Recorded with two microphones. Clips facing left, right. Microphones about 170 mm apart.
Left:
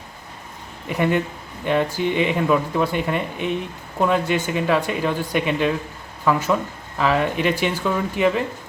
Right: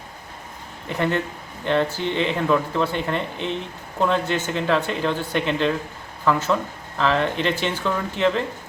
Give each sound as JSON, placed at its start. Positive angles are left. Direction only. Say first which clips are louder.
{"t": 0.9, "sound": "speech", "louder": "left 3 dB", "side_deg": 10}